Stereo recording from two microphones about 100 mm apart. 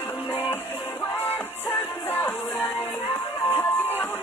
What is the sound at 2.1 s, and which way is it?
Music, 20° left (ahead or behind).